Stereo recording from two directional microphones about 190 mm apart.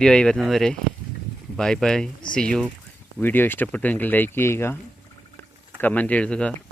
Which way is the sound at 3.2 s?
10° left (ahead or behind).